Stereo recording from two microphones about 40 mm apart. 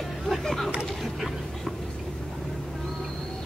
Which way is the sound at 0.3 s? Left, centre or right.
Centre.